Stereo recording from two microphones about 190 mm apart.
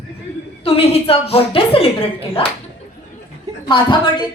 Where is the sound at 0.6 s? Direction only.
30° left (ahead or behind).